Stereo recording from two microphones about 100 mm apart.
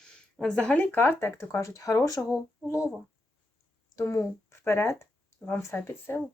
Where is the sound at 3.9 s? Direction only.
30° left (ahead or behind).